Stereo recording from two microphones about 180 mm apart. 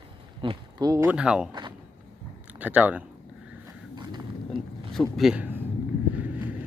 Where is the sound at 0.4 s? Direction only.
20° right (ahead or behind); by 1.5 s 5° right (ahead or behind).